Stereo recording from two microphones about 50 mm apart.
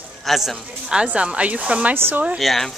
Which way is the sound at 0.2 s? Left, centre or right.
Centre.